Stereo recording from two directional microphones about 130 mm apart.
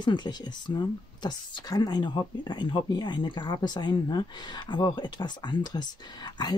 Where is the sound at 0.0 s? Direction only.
35° left (ahead or behind).